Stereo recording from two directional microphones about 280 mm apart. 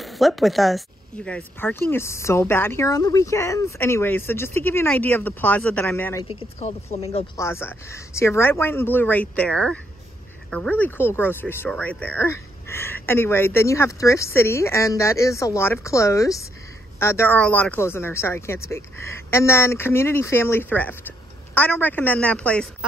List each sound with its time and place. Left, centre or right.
0.0 s speech: centre
6.2 s speech: left
7.3 s a woman's voice: centre